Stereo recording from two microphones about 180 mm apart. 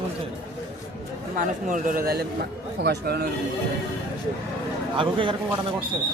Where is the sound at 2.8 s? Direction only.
65° right (ahead or behind).